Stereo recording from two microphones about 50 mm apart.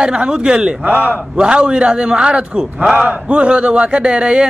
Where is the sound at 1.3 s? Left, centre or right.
Centre.